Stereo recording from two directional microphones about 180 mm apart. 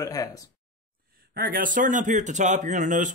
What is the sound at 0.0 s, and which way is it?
Speech, 20° left (ahead or behind).